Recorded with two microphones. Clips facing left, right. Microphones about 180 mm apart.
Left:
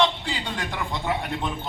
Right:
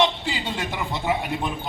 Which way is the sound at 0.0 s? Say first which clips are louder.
Right 1 dB; 20° right (ahead or behind).